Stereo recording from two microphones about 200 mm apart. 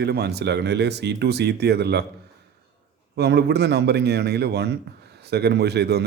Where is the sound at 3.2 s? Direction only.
55° right (ahead or behind).